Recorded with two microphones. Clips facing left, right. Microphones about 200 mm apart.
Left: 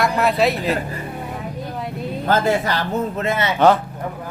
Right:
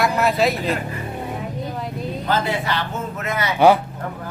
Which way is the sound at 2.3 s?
45° left (ahead or behind).